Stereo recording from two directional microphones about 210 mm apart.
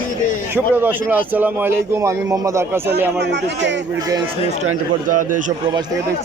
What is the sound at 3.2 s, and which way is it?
Speech, 55° right (ahead or behind).